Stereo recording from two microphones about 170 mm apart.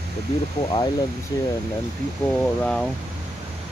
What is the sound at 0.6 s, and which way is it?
Speech, 25° left (ahead or behind).